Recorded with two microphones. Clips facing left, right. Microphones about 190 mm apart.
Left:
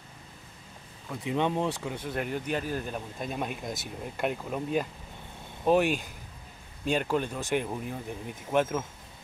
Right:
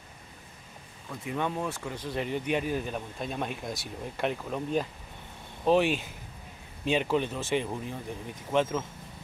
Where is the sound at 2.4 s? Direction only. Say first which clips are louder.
Right 2 dB; 10° right (ahead or behind).